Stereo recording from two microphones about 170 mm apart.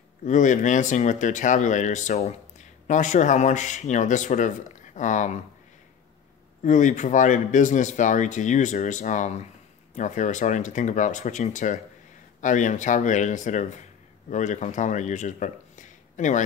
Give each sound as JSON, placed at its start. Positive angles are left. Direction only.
{"t": 0.2, "sound": "speech", "side_deg": 45}
{"t": 6.6, "sound": "speech", "side_deg": 45}